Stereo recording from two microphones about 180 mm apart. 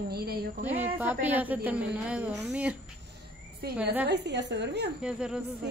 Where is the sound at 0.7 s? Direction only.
10° right (ahead or behind).